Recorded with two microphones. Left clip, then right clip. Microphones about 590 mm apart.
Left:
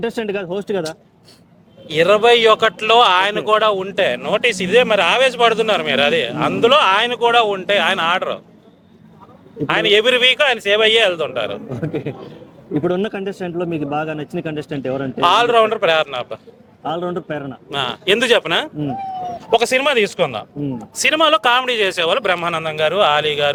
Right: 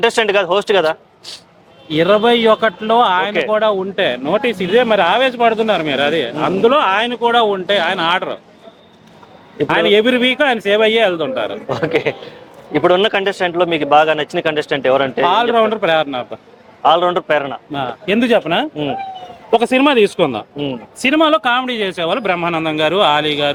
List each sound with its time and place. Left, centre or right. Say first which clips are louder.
0.0 s speech: right 9 dB; right
1.9 s a man's voice: even; left
9.6 s a man's voice: right 1 dB; left
13.1 s speech: right 9 dB; right
15.2 s a man's voice: left 4 dB; left
16.9 s speech: right 10 dB; right
17.7 s a man's voice: left 1 dB; left
19.5 s a man's voice: right 3 dB; left
21.0 s a man's voice: right 1 dB; left